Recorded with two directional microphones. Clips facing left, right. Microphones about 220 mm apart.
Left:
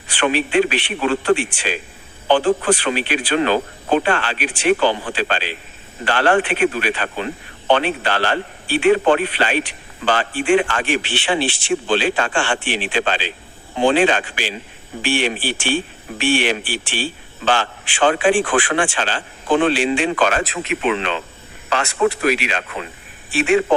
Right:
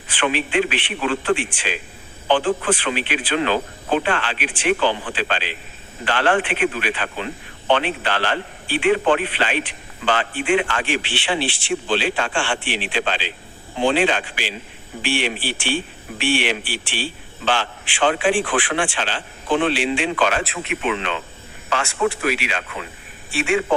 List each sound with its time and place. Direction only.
0.1 s speech: 40° left (ahead or behind)